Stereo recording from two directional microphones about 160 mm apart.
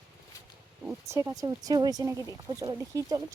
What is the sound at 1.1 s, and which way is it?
Speech, 20° right (ahead or behind).